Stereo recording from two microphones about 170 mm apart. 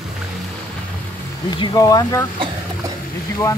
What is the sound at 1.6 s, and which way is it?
Speech, 25° left (ahead or behind).